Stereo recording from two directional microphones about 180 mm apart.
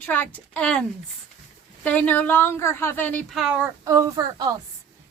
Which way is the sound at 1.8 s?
10° left (ahead or behind).